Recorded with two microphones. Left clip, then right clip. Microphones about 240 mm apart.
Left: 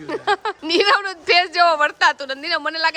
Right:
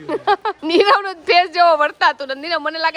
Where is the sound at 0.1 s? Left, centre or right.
Centre.